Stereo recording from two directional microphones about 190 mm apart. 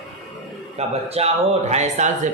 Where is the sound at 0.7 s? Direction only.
35° right (ahead or behind).